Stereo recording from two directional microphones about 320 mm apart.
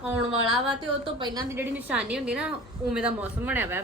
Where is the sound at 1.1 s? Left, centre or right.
Centre.